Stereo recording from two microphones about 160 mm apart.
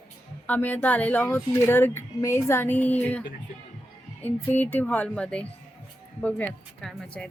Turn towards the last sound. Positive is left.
turn(degrees=5)  # may be behind; listen again after turning